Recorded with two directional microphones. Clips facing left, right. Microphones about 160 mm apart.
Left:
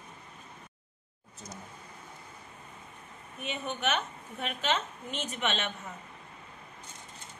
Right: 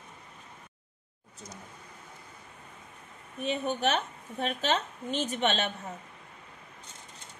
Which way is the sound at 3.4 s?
35° right (ahead or behind).